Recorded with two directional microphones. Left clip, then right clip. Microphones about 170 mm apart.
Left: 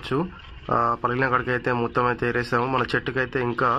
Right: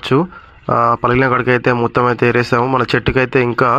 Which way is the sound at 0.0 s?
40° right (ahead or behind).